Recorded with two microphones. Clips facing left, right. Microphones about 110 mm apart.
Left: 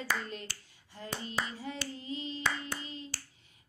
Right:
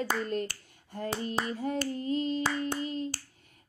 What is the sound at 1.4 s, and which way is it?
Clapping, 50° right (ahead or behind).